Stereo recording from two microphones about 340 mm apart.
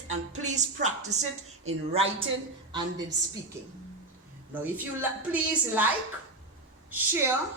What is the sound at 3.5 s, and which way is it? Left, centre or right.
A woman's voice, centre.